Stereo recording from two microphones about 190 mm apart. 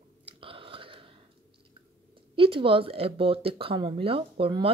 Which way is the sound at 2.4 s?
25° right (ahead or behind).